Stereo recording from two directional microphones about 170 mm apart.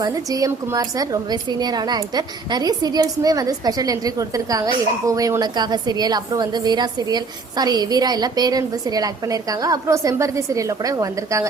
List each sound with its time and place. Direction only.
0.0 s a woman's voice: 20° right (ahead or behind)